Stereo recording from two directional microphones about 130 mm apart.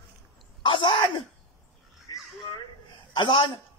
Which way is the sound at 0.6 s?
40° left (ahead or behind).